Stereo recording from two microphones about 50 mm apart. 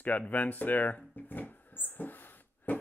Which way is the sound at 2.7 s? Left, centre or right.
Left.